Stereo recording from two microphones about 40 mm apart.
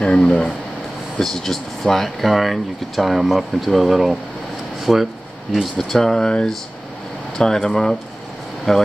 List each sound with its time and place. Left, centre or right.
0.0 s speech: left
1.2 s speech: centre
7.3 s speech: centre